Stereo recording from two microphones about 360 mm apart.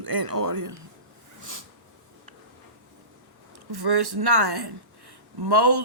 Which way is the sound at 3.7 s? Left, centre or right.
Right.